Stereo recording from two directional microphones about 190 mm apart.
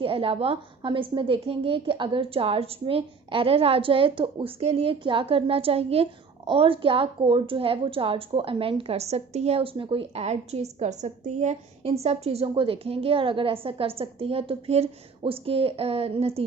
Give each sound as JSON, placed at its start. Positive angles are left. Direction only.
{"t": 0.0, "sound": "a woman's voice", "side_deg": -30}